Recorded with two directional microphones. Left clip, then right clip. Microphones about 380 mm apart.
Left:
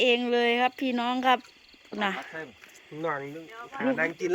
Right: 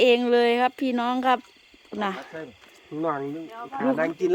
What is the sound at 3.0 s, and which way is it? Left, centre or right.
Speech, centre.